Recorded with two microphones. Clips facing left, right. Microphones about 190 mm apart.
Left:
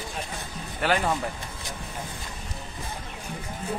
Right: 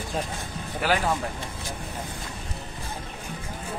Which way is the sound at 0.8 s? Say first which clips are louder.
Even; centre (ahead or behind).